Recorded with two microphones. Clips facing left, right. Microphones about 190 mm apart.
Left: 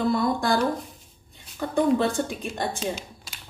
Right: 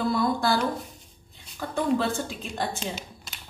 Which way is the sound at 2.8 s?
Centre (ahead or behind).